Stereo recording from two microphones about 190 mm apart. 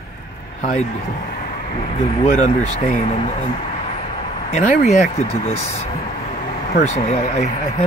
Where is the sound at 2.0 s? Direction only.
35° left (ahead or behind).